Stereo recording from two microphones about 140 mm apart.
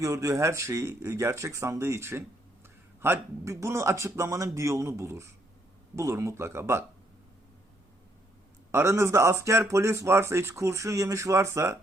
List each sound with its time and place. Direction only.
0.0 s speech: 25° right (ahead or behind)
8.7 s speech: 20° right (ahead or behind)